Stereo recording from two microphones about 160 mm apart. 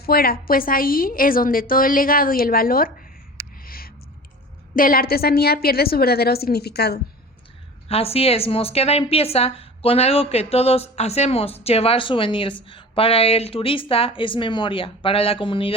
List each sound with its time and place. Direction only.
0.0 s a woman's voice: 70° left (ahead or behind)
3.7 s a sound: 65° left (ahead or behind)
4.7 s a woman's voice: 60° left (ahead or behind); by 7.0 s 85° left
7.9 s a woman's voice: 40° left (ahead or behind)